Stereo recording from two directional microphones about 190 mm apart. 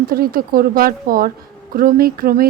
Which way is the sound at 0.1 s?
50° right (ahead or behind).